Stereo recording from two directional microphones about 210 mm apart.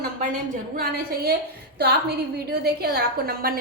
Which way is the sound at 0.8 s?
45° right (ahead or behind).